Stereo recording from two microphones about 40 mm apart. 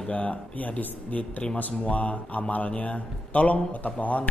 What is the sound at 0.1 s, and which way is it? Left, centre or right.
A man's voice, left.